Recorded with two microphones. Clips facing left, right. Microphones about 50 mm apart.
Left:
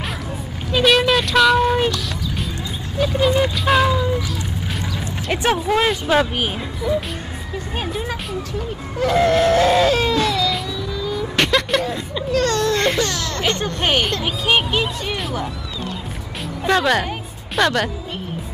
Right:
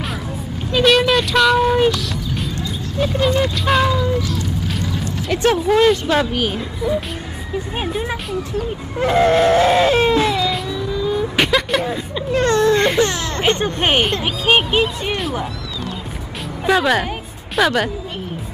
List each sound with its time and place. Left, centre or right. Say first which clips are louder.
0.7 s music: right 1 dB; centre
3.2 s a sound: left 1 dB; centre
5.3 s speech: right 3 dB; centre
5.6 s speech: right 5 dB; centre
6.8 s speech: even; centre
9.0 s baby cry: right 2 dB; right
10.7 s vehicle: right 4 dB; centre
11.8 s speech: right 1 dB; centre
12.3 s baby cry: right 4 dB; right
13.0 s speech: right 4 dB; right
16.6 s speech: right 1 dB; centre